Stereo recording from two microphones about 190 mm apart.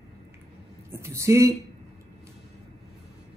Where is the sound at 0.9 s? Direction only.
15° right (ahead or behind).